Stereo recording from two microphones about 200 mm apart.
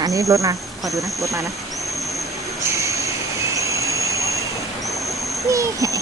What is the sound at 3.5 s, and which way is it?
Jet engine, 15° right (ahead or behind).